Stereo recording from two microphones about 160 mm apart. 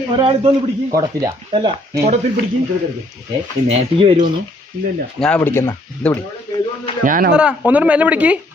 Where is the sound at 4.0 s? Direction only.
35° right (ahead or behind).